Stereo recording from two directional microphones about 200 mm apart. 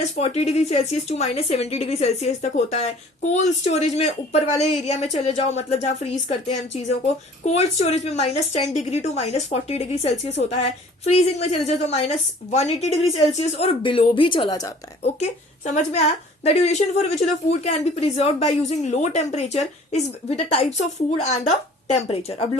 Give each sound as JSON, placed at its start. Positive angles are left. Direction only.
{"t": 0.0, "sound": "a woman's voice", "side_deg": 30}
{"t": 15.0, "sound": "a woman's voice", "side_deg": 35}
{"t": 18.2, "sound": "a woman's voice", "side_deg": 30}